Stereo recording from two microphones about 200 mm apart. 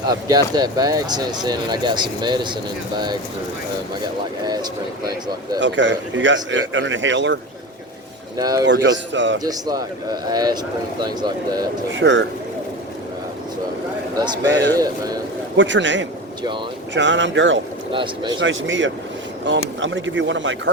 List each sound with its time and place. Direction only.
0.1 s speech: 20° right (ahead or behind)
4.0 s speech: 20° right (ahead or behind)
5.5 s a man's voice: 65° right (ahead or behind)
8.4 s speech: 20° right (ahead or behind)
8.6 s a man's voice: 60° right (ahead or behind)
9.4 s speech: 20° right (ahead or behind)
11.9 s a man's voice: 65° right (ahead or behind)
14.8 s speech: 20° right (ahead or behind)
15.5 s a man's voice: 65° right (ahead or behind)
17.9 s speech: 25° right (ahead or behind)
18.3 s a man's voice: 70° right (ahead or behind)